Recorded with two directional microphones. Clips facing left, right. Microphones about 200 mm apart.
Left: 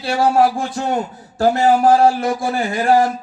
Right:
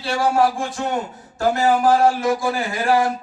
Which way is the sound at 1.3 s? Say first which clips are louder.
Left 4 dB; 30° left (ahead or behind).